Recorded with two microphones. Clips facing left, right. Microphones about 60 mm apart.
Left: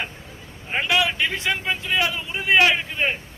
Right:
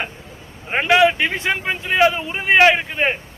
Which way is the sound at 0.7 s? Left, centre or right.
Right.